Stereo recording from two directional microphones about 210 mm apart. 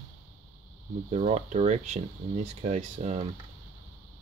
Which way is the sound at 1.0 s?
35° right (ahead or behind).